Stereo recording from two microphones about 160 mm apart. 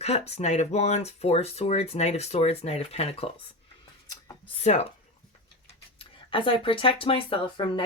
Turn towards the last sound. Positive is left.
turn(degrees=35)  # may be behind; listen again after turning